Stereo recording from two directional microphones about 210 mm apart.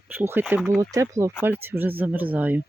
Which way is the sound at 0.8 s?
15° right (ahead or behind).